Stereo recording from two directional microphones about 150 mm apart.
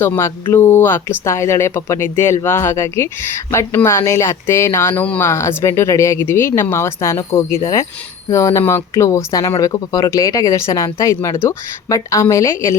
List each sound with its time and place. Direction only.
0.0 s speech: 15° left (ahead or behind)